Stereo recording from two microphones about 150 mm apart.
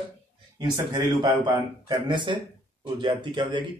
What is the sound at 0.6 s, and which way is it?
A man's voice, 25° right (ahead or behind).